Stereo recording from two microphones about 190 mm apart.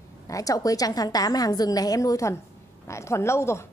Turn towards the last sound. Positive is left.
turn(degrees=15)  # may be behind; listen again after turning